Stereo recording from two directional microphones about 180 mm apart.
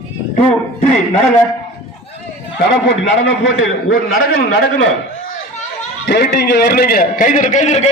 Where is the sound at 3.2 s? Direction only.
80° left.